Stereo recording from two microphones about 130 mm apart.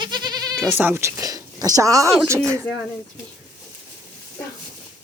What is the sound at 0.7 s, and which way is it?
A woman's voice, 15° right (ahead or behind).